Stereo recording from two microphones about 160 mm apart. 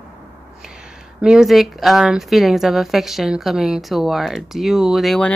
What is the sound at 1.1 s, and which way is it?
Speech, 5° right (ahead or behind).